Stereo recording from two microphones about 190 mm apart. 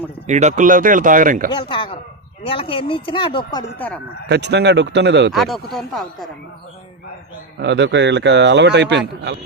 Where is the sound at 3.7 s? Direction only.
5° left (ahead or behind).